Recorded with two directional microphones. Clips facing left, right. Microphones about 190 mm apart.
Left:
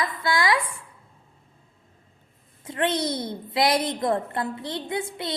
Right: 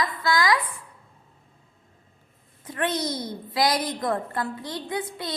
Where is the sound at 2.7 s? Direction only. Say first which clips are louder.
Left 2 dB; 25° left (ahead or behind).